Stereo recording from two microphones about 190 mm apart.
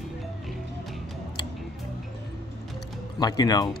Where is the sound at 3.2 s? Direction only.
20° left (ahead or behind).